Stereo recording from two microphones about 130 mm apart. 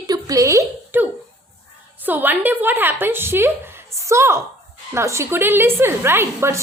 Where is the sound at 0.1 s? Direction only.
25° right (ahead or behind).